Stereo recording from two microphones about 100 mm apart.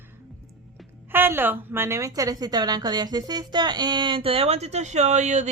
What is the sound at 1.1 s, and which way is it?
A woman's voice, 20° right (ahead or behind).